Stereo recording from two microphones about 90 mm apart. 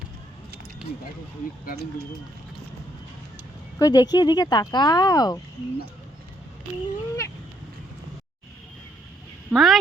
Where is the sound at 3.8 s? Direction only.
50° left (ahead or behind).